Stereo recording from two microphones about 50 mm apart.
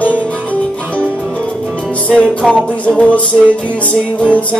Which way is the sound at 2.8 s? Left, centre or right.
Left.